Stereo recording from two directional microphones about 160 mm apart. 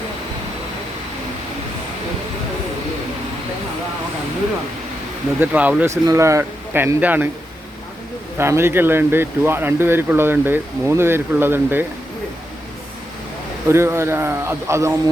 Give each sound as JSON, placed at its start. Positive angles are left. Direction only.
{"t": 5.4, "sound": "speech", "side_deg": -10}
{"t": 8.4, "sound": "speech", "side_deg": -15}
{"t": 13.7, "sound": "speech", "side_deg": -15}